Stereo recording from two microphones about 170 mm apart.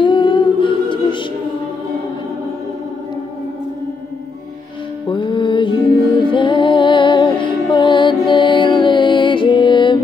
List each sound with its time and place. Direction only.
0.0 s music: 30° left (ahead or behind)
5.1 s music: 30° left (ahead or behind)